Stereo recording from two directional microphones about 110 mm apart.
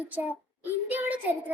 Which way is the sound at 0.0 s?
15° right (ahead or behind).